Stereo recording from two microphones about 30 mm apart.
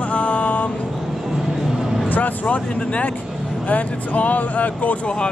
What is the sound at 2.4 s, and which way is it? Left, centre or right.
Speech, left.